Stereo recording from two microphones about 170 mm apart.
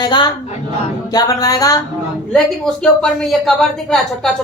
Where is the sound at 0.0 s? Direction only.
25° left (ahead or behind).